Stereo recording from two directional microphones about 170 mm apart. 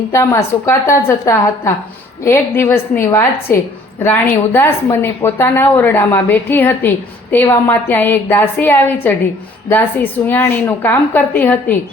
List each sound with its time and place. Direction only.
0.1 s a woman's voice: 15° left (ahead or behind)